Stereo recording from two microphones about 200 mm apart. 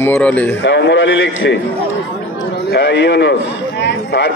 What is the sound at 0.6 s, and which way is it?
A man's voice, 60° left (ahead or behind).